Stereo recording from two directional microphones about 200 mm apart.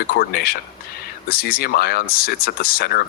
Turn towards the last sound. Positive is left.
turn(degrees=50)  # may be behind; listen again after turning